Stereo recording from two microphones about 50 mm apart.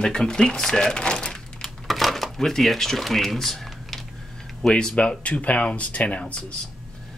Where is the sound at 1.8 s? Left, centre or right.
Centre.